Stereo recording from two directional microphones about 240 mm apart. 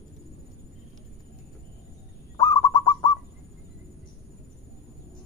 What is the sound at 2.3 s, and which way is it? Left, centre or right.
Bird, centre.